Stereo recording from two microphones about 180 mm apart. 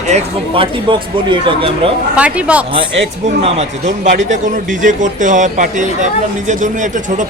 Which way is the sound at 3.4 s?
40° right (ahead or behind).